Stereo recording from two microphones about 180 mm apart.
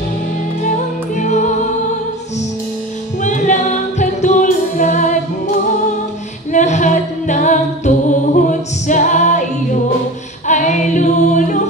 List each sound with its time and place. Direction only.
1.1 s music: 40° left (ahead or behind)
3.2 s music: 45° left (ahead or behind)
6.5 s a capella: 40° left (ahead or behind)
10.5 s a capella: 40° left (ahead or behind)